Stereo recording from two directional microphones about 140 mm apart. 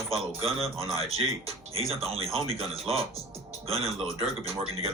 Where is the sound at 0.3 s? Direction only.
45° right (ahead or behind).